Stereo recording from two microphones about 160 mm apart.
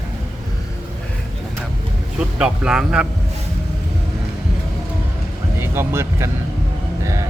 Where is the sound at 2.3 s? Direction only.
5° right (ahead or behind).